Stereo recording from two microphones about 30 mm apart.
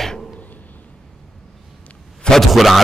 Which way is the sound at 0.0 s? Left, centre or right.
Centre.